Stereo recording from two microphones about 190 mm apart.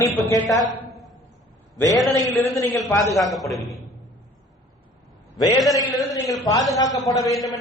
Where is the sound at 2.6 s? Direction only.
15° left (ahead or behind).